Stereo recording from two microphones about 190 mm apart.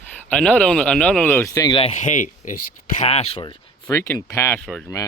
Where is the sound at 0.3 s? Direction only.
5° left (ahead or behind); by 2.6 s 40° left (ahead or behind).